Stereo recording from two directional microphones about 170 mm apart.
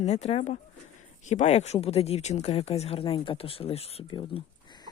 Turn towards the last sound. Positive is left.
turn(degrees=30)  # may be behind; listen again after turning